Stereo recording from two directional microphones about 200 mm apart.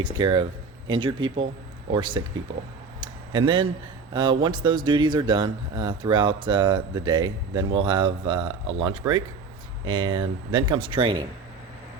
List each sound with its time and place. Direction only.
0.0 s speech: 25° right (ahead or behind)
3.0 s a sound: 25° right (ahead or behind)
4.1 s speech: 25° right (ahead or behind)